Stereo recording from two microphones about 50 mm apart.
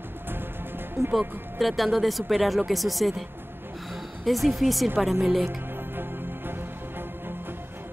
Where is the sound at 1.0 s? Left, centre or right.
Right.